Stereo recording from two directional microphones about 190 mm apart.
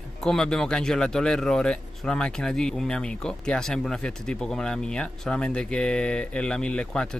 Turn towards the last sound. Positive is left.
turn(degrees=5)  # may be behind; listen again after turning